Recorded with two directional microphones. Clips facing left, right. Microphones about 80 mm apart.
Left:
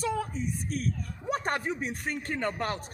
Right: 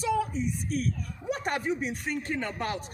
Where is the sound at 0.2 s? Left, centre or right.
Left.